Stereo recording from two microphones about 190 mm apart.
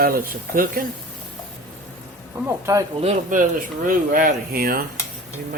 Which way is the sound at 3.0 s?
40° right (ahead or behind).